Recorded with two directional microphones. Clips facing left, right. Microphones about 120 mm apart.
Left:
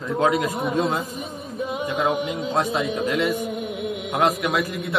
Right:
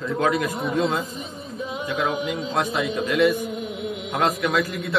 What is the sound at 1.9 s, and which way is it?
A man's voice, 25° left (ahead or behind).